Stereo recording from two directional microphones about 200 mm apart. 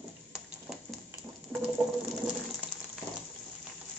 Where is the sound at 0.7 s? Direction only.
Centre (ahead or behind).